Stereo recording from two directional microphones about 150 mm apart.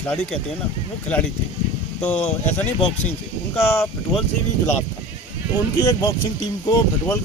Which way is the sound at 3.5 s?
15° left (ahead or behind).